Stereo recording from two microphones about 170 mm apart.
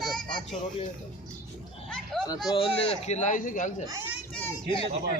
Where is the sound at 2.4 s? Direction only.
30° left (ahead or behind).